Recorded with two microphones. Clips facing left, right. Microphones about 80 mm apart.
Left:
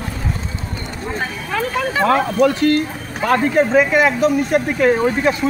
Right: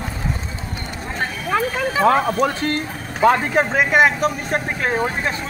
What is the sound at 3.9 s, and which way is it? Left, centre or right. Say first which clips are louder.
Speech: left 1 dB; right.